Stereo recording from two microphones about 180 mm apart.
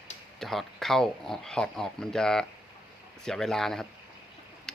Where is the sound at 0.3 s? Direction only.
Centre (ahead or behind).